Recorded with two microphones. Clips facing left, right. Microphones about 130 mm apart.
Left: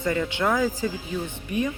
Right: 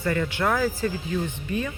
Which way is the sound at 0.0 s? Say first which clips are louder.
Even; 15° left (ahead or behind).